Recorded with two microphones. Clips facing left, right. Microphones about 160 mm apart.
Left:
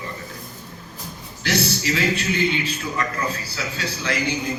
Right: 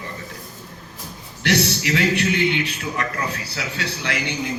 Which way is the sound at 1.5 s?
65° right (ahead or behind).